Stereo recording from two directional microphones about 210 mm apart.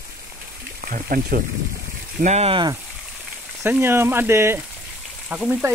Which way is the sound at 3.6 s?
10° right (ahead or behind).